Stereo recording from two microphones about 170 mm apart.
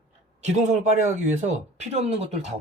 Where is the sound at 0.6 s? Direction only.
45° right (ahead or behind).